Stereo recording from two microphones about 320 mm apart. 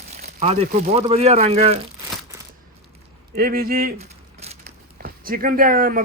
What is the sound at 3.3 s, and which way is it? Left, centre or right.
Speech, right.